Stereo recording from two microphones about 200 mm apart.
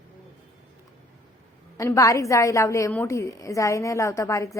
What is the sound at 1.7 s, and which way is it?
Speech, 15° left (ahead or behind).